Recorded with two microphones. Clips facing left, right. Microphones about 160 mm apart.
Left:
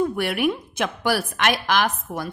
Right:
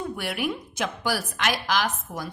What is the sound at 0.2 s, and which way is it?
A woman's voice, 60° left (ahead or behind).